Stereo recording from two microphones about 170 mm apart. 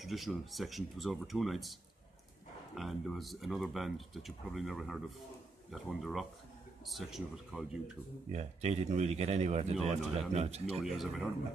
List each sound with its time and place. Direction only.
0.0 s speech: centre (ahead or behind)
8.3 s a man's voice: 40° right (ahead or behind)
10.8 s speech: centre (ahead or behind)